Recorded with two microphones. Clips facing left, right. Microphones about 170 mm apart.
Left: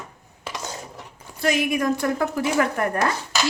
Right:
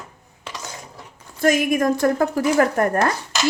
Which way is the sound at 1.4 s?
45° right (ahead or behind).